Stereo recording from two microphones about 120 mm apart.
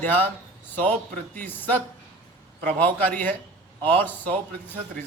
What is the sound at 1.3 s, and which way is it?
Speech, 15° left (ahead or behind).